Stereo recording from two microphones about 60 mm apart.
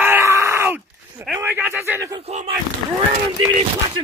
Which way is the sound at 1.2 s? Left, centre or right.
Right.